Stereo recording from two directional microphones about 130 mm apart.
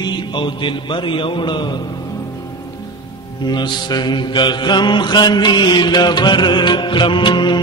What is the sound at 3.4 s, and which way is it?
Mantra, 35° left (ahead or behind).